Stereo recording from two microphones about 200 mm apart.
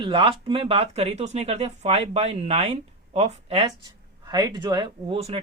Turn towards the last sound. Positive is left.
turn(degrees=-30)  # may be behind; listen again after turning